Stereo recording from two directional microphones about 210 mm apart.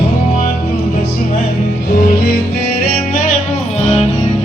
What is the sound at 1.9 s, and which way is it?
Music, 45° left (ahead or behind).